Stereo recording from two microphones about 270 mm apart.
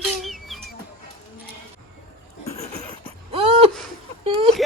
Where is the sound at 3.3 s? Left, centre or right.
Right.